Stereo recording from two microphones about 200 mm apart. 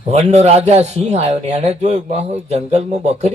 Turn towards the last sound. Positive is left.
turn(degrees=-35)  # may be behind; listen again after turning